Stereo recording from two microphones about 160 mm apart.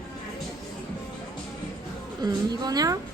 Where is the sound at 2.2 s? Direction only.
25° right (ahead or behind).